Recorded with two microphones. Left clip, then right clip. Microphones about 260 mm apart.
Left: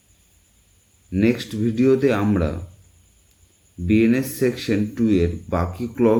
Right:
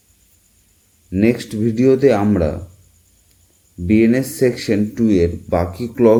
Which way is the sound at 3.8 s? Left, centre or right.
Centre.